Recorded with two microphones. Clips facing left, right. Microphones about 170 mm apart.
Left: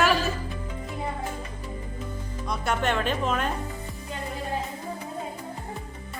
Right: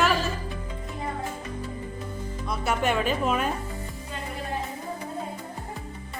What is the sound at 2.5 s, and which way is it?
A woman's voice, 5° right (ahead or behind).